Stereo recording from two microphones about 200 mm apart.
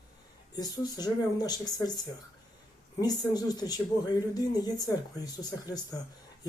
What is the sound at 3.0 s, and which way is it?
A man's voice, 20° left (ahead or behind).